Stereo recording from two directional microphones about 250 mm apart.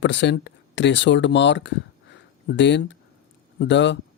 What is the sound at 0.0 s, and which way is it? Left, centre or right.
Speech, left.